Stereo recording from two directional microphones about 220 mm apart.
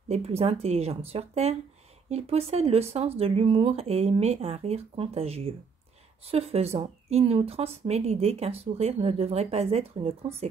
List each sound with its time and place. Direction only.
0.1 s a woman's voice: 30° right (ahead or behind)